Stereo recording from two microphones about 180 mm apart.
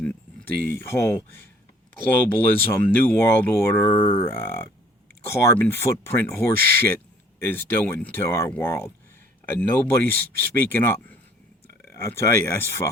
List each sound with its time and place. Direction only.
0.0 s a sound: 10° left (ahead or behind)
0.6 s speech: 15° left (ahead or behind)
4.0 s speech: 30° left (ahead or behind)
4.3 s speech: 10° left (ahead or behind)